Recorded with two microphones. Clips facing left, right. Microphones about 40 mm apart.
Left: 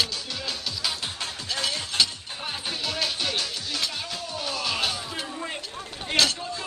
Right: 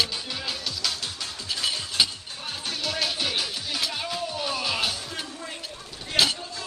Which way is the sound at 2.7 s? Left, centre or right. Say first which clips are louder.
Right 1 dB; centre.